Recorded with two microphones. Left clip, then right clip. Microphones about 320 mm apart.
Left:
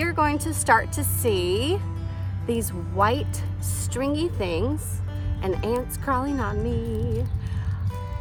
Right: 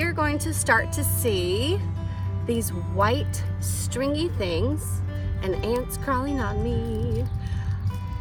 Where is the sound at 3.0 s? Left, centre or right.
Centre.